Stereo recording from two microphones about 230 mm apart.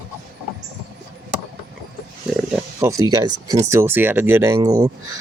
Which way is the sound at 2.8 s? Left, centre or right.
Centre.